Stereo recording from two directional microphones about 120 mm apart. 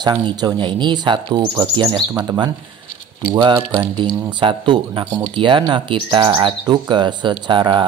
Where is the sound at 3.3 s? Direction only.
40° right (ahead or behind).